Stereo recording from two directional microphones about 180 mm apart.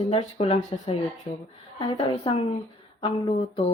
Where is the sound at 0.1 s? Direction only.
35° left (ahead or behind).